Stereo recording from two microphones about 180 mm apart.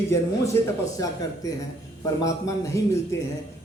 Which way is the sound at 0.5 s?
15° left (ahead or behind).